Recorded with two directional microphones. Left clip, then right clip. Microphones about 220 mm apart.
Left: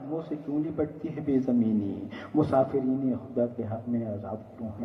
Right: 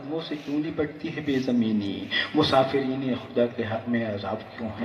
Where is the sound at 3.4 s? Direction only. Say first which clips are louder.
Right 6 dB; 40° right (ahead or behind).